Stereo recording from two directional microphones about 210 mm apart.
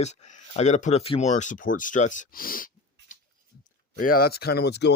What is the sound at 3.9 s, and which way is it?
Speech, 45° left (ahead or behind).